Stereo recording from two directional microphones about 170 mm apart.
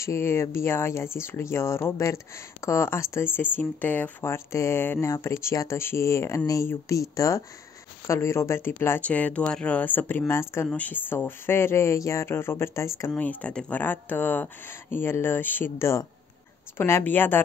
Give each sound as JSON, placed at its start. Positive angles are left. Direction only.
{"t": 0.0, "sound": "speech", "side_deg": 15}